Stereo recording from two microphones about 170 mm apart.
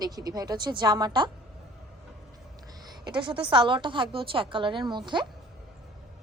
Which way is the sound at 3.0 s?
25° right (ahead or behind).